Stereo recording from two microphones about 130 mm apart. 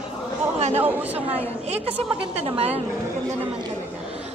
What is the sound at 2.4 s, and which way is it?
Speech, 45° right (ahead or behind).